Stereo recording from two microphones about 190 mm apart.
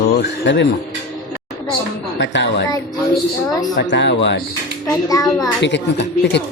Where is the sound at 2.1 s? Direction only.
70° left (ahead or behind).